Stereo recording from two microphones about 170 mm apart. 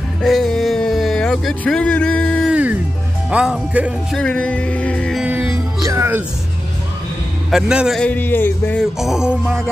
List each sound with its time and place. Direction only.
0.2 s a sound: centre (ahead or behind)
2.5 s music: 10° right (ahead or behind)
4.2 s music: 5° left (ahead or behind)
5.2 s music: 10° right (ahead or behind)
7.5 s a man's voice: 5° right (ahead or behind); by 8.8 s 10° left (ahead or behind)
9.0 s a man's voice: 5° right (ahead or behind)